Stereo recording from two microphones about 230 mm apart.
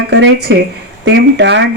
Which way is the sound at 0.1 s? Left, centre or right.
Right.